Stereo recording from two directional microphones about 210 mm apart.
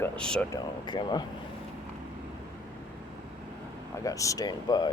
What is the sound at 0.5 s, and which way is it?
Speech, 20° left (ahead or behind).